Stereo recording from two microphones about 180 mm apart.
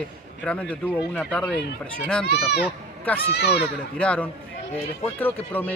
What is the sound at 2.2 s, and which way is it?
A child's voice, 65° left (ahead or behind).